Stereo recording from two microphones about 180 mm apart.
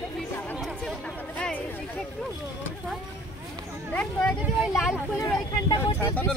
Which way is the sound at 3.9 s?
5° left (ahead or behind).